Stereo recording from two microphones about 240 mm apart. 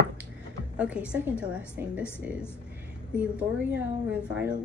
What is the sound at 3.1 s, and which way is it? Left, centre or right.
Speech, centre.